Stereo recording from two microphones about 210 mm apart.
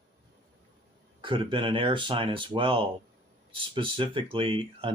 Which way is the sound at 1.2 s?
25° right (ahead or behind).